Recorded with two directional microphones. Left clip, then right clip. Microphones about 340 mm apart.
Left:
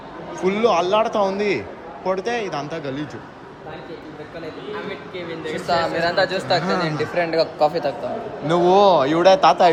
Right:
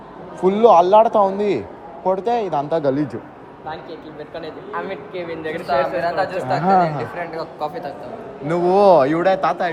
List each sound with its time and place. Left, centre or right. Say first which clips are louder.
0.4 s a man's voice: right 6 dB; centre
4.9 s a man's voice: right 2 dB; centre
5.6 s speech: right 1 dB; left
8.4 s a man's voice: right 1 dB; centre